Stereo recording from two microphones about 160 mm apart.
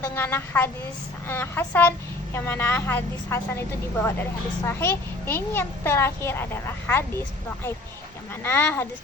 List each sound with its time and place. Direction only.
0.2 s a woman's voice: 15° left (ahead or behind)
8.4 s a woman's voice: 15° left (ahead or behind)